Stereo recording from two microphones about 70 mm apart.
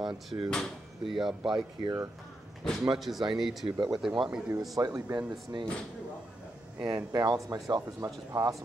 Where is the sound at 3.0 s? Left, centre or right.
Centre.